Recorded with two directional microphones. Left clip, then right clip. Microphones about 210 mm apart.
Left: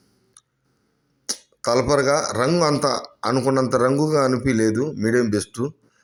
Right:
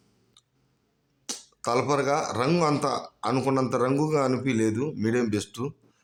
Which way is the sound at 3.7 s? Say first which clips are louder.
Left 6 dB; 15° left (ahead or behind).